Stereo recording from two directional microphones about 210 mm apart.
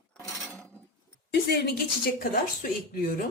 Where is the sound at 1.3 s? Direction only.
50° left (ahead or behind).